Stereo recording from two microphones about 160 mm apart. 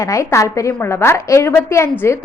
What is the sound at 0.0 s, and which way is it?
A woman's voice, 20° left (ahead or behind).